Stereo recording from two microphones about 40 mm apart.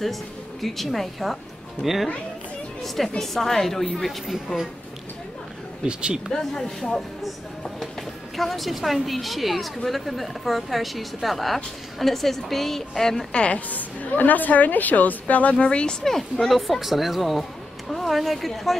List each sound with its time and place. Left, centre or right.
0.0 s a woman's voice: centre
3.2 s a woman's voice: centre
5.9 s speech: right
6.3 s a woman's voice: centre
8.4 s speech: centre
13.3 s speech: left
13.7 s a woman's voice: left
15.5 s speech: left
16.0 s speech: centre